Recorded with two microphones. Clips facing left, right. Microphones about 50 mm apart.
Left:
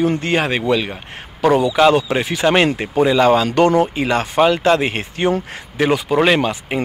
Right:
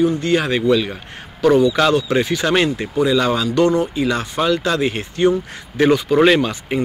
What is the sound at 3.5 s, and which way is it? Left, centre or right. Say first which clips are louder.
Speech: left 2 dB; left.